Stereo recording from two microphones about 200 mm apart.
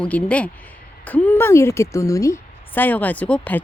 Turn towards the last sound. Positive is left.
turn(degrees=5)  # may be behind; listen again after turning